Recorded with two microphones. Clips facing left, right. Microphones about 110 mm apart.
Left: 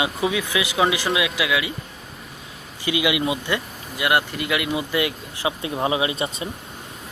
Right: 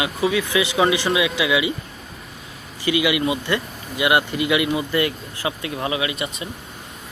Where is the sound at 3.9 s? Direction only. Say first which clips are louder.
Right 2 dB; 5° right (ahead or behind); by 6.5 s 30° left (ahead or behind).